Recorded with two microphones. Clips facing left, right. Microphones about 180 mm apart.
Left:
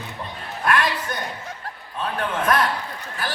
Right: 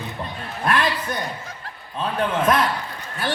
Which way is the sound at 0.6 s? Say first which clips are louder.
Even; 30° right (ahead or behind).